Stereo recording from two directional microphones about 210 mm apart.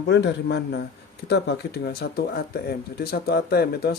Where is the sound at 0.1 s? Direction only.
55° left (ahead or behind).